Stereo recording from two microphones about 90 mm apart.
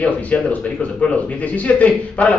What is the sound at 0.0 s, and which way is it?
Speech, 15° left (ahead or behind).